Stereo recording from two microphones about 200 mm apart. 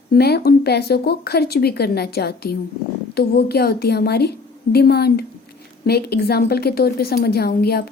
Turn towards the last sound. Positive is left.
turn(degrees=50)  # may be behind; listen again after turning